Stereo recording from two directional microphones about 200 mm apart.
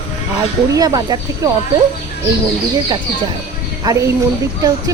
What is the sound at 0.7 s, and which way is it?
Speech, 15° right (ahead or behind).